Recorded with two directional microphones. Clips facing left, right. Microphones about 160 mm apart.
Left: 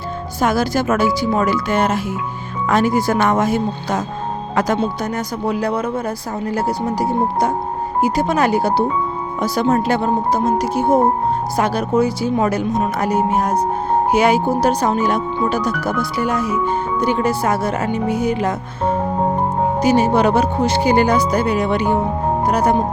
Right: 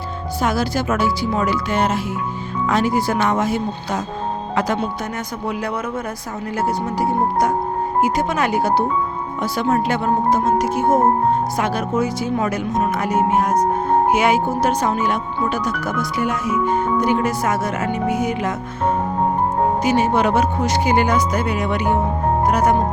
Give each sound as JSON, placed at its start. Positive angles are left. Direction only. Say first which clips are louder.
{"t": 0.4, "sound": "speech", "louder": "left 3 dB", "side_deg": 45}
{"t": 5.5, "sound": "speech", "louder": "left 5 dB", "side_deg": 35}
{"t": 19.8, "sound": "speech", "louder": "left 6 dB", "side_deg": 35}